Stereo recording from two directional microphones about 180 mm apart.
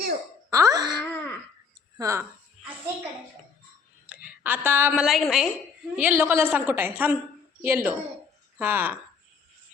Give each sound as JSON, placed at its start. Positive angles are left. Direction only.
{"t": 0.5, "sound": "speech", "side_deg": -20}
{"t": 1.0, "sound": "throat clearing", "side_deg": 10}
{"t": 2.0, "sound": "a woman's voice", "side_deg": -15}
{"t": 4.0, "sound": "a woman's voice", "side_deg": -10}